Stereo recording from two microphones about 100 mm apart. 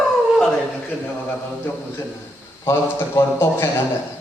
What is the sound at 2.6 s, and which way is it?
Speech, 25° left (ahead or behind).